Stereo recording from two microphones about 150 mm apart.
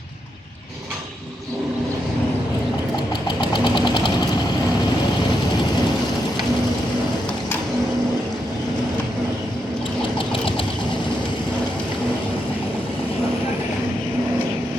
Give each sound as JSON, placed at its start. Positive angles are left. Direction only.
{"t": 3.2, "sound": "engine", "side_deg": 30}